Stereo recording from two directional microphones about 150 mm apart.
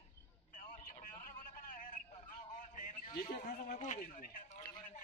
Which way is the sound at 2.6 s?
60° left (ahead or behind).